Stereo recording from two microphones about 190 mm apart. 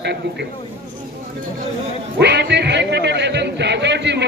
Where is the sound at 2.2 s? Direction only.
65° right (ahead or behind).